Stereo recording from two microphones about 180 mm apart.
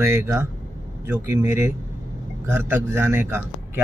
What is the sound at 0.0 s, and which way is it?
Speech, 15° right (ahead or behind).